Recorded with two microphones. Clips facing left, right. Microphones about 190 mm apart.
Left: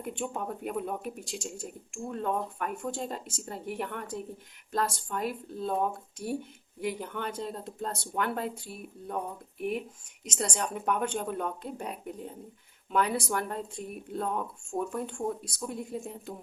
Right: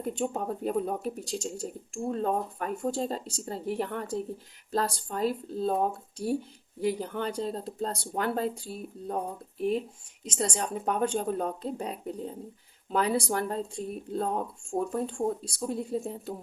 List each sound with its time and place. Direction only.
0.0 s speech: 35° right (ahead or behind)
6.8 s speech: 35° right (ahead or behind)